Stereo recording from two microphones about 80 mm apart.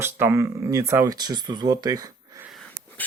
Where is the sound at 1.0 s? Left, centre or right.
Right.